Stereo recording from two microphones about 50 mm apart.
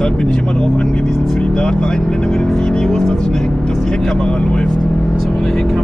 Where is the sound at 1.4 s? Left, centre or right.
Centre.